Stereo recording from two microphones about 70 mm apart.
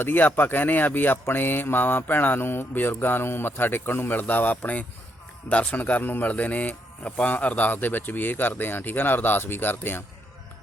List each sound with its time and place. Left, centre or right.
0.0 s a man's voice: left